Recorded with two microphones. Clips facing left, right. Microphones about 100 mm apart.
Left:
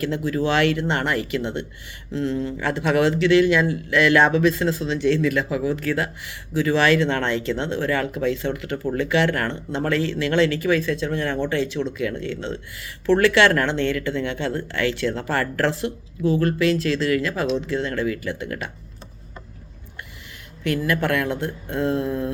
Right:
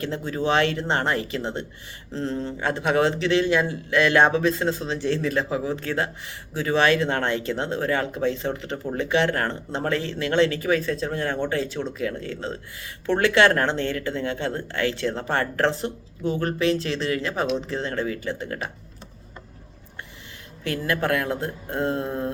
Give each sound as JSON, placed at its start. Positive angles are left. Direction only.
{"t": 0.0, "sound": "a man's voice", "side_deg": -30}
{"t": 20.7, "sound": "speech", "side_deg": -30}